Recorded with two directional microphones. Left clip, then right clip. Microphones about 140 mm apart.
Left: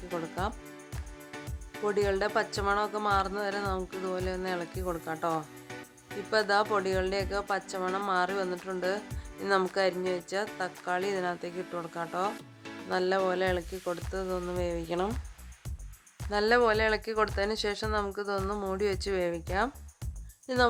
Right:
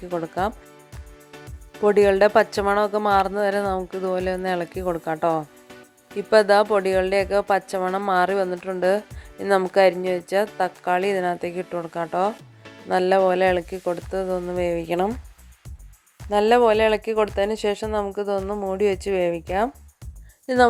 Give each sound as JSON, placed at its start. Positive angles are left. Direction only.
{"t": 0.1, "sound": "speech", "side_deg": -45}
{"t": 1.8, "sound": "speech", "side_deg": -50}
{"t": 16.3, "sound": "speech", "side_deg": -35}
{"t": 20.5, "sound": "speech", "side_deg": -50}